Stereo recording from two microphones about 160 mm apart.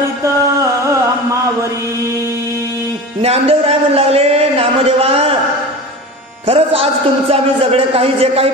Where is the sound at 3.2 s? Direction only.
40° right (ahead or behind).